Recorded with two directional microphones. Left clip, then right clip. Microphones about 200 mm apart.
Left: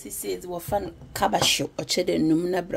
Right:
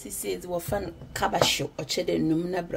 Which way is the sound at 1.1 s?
25° left (ahead or behind).